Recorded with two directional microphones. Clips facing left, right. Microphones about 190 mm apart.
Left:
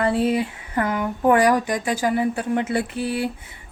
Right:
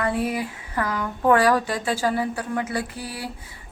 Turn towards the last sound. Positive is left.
turn(degrees=25)  # may be behind; listen again after turning